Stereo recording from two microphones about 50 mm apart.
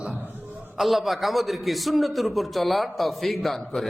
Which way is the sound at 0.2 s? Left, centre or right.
Right.